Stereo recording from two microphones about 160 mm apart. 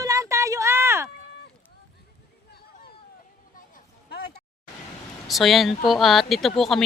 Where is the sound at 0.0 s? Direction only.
20° right (ahead or behind).